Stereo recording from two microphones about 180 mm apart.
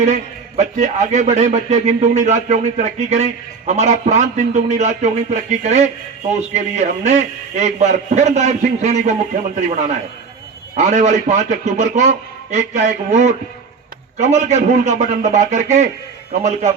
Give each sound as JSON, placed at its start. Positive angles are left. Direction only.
{"t": 0.0, "sound": "a man's voice", "side_deg": -40}